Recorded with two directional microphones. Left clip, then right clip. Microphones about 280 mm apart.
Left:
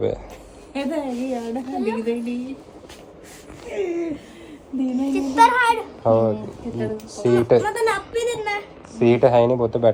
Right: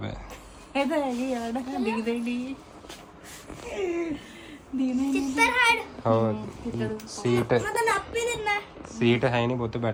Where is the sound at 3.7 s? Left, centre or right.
Centre.